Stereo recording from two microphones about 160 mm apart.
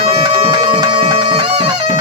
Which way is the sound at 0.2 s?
30° right (ahead or behind).